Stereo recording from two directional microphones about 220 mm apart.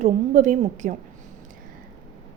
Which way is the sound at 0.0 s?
35° right (ahead or behind).